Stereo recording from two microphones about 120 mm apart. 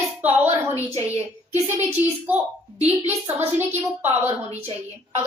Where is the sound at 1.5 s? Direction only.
70° right (ahead or behind).